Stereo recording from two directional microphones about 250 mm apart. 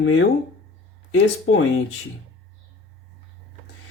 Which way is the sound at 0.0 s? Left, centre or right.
Left.